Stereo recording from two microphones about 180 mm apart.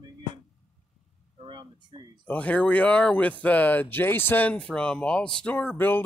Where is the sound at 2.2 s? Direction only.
10° left (ahead or behind).